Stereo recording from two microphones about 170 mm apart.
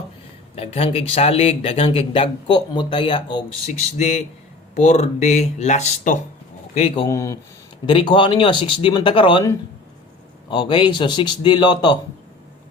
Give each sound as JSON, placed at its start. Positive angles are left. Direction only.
{"t": 0.5, "sound": "speech", "side_deg": 35}
{"t": 3.7, "sound": "speech", "side_deg": 40}
{"t": 7.1, "sound": "speech", "side_deg": 15}
{"t": 7.9, "sound": "speech", "side_deg": 30}
{"t": 10.5, "sound": "speech", "side_deg": 25}